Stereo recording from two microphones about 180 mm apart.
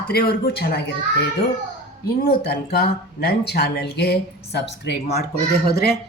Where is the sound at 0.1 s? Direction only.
60° left (ahead or behind).